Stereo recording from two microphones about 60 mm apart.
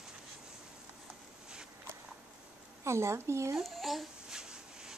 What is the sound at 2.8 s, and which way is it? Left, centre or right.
Speech, right.